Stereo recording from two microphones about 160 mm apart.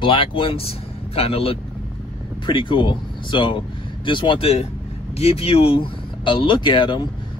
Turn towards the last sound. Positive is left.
turn(degrees=30)  # may be behind; listen again after turning